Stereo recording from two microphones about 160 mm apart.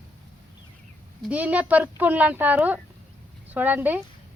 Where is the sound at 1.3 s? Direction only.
10° right (ahead or behind).